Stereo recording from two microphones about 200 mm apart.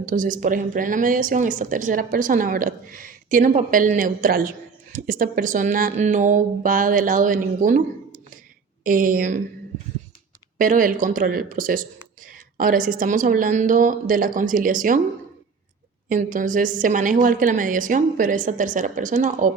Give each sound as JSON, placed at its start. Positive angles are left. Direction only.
{"t": 0.0, "sound": "speech", "side_deg": -40}
{"t": 10.6, "sound": "speech", "side_deg": -45}
{"t": 16.0, "sound": "speech", "side_deg": -40}